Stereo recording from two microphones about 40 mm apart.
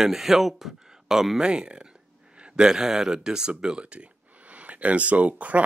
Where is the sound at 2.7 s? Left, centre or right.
Centre.